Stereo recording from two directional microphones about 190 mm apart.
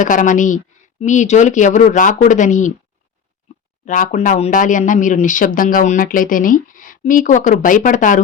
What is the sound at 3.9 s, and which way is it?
Speech, 45° left (ahead or behind).